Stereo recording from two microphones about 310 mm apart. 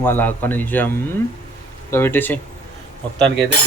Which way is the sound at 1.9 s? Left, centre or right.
Centre.